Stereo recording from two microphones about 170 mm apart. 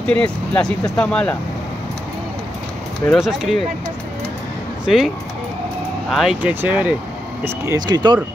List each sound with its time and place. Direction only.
0.0 s speech: 5° left (ahead or behind)
3.1 s speech: centre (ahead or behind)
4.8 s speech: centre (ahead or behind); by 8.2 s 25° right (ahead or behind)